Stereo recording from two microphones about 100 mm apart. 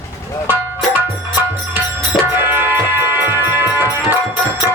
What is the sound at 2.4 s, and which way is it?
Music, 20° right (ahead or behind).